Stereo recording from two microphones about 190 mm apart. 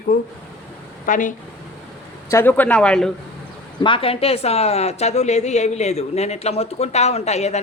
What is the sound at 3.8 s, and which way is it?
A woman's voice, 30° left (ahead or behind).